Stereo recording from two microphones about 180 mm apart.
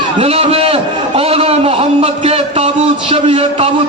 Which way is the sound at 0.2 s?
35° right (ahead or behind).